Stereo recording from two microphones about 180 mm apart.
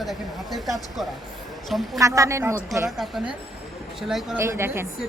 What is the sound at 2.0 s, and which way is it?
Speech, 15° right (ahead or behind).